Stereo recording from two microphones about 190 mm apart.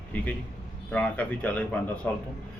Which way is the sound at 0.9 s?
5° left (ahead or behind).